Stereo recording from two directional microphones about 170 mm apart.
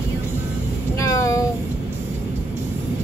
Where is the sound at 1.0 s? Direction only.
20° left (ahead or behind).